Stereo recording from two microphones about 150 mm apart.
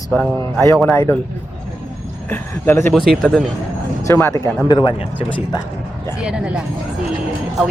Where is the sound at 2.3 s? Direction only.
15° left (ahead or behind).